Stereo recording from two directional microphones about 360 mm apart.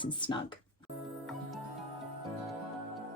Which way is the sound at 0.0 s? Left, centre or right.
Centre.